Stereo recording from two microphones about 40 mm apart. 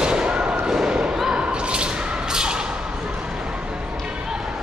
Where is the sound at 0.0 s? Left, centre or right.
Right.